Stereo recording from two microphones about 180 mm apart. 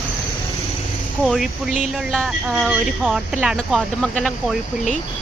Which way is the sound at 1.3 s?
Centre (ahead or behind).